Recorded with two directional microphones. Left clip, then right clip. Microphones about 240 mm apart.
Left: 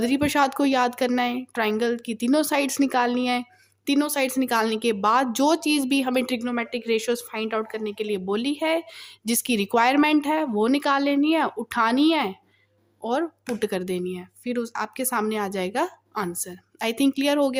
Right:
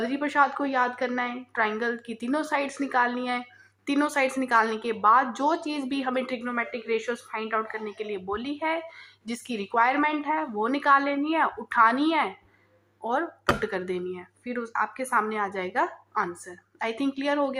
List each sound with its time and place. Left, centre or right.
0.0 s a woman's voice: left